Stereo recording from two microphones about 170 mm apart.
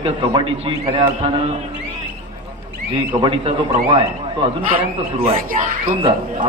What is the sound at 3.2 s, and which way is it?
Speech, 30° right (ahead or behind).